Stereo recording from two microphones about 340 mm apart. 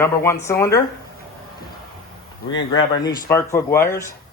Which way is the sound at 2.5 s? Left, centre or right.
Left.